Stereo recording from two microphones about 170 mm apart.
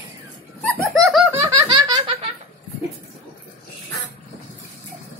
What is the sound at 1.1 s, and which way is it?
Laughter, 10° right (ahead or behind).